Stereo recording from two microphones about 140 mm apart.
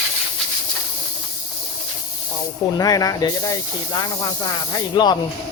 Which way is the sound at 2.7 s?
25° left (ahead or behind).